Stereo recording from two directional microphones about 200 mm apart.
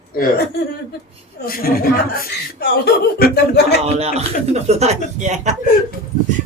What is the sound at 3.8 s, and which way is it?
Speech, 30° right (ahead or behind).